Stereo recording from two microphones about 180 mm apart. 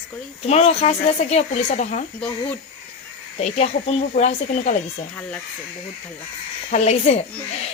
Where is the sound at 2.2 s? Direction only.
10° left (ahead or behind).